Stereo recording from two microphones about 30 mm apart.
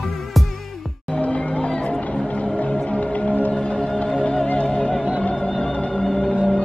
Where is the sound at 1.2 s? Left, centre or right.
Left.